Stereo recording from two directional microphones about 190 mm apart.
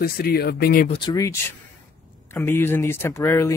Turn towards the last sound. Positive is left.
turn(degrees=15)  # may be behind; listen again after turning